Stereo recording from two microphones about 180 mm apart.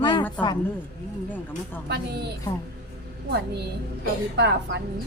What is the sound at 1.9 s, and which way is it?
Speech, 65° right (ahead or behind).